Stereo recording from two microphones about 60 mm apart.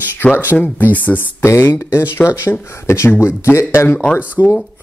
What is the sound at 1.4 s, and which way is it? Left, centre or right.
A man's voice, left.